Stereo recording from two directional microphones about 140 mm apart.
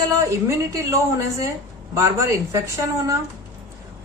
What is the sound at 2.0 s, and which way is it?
Speech, 20° right (ahead or behind).